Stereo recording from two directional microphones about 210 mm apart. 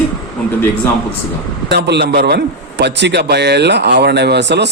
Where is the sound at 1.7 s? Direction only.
55° right (ahead or behind).